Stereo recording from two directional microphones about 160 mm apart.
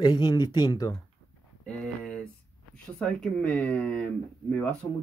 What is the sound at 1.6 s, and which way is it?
Speech, 5° left (ahead or behind).